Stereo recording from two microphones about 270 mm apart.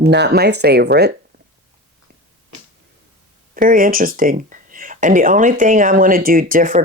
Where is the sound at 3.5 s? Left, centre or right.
Right.